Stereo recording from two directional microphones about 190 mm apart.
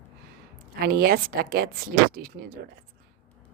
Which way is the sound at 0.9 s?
50° right (ahead or behind).